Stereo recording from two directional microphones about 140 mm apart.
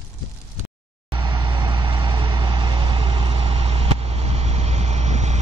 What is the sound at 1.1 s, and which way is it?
Vehicle, 35° right (ahead or behind).